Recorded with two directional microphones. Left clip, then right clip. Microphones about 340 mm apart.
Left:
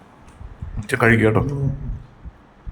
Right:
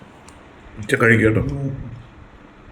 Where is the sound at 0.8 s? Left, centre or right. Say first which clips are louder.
Right 1 dB; centre.